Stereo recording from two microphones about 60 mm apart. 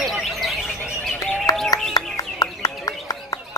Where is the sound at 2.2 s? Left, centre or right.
Left.